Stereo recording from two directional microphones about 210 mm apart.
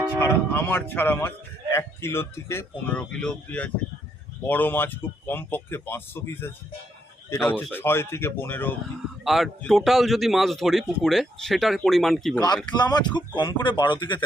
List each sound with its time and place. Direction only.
0.2 s a man's voice: 10° left (ahead or behind)
12.7 s speech: 20° left (ahead or behind)